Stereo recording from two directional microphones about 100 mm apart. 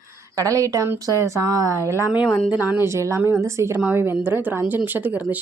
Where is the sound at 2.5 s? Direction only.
15° right (ahead or behind).